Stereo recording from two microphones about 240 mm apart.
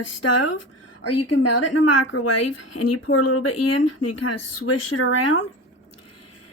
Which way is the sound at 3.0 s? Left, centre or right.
Left.